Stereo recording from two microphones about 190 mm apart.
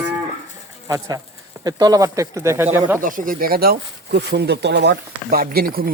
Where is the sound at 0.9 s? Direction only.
15° right (ahead or behind).